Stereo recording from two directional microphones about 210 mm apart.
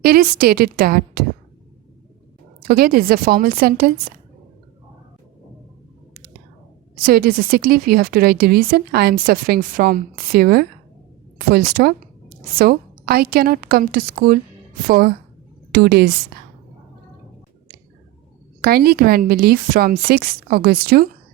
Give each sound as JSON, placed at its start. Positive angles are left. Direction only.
{"t": 0.0, "sound": "a woman's voice", "side_deg": -45}
{"t": 2.6, "sound": "a woman's voice", "side_deg": -45}
{"t": 7.0, "sound": "a woman's voice", "side_deg": -45}
{"t": 18.6, "sound": "a woman's voice", "side_deg": -45}